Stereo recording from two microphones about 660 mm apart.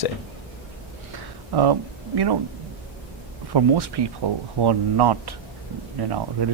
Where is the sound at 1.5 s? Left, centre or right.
Right.